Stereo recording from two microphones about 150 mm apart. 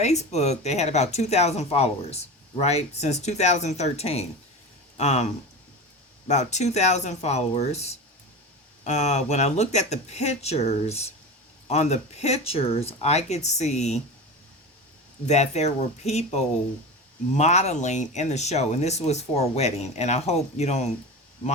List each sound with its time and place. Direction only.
0.0 s speech: 50° left (ahead or behind)
6.2 s speech: 50° left (ahead or behind)
15.3 s speech: 50° left (ahead or behind)